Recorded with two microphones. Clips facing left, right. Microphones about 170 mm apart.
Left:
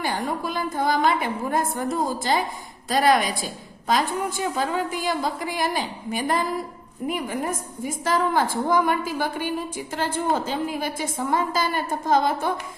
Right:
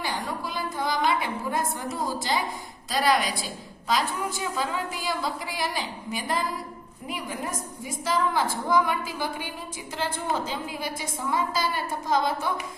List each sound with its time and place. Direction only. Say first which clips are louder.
0.0 s a woman's voice: left 5 dB; 50° left (ahead or behind)